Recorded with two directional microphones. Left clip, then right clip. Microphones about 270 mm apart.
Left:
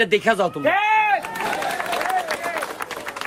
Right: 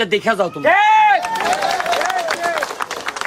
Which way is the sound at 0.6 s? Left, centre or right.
Centre.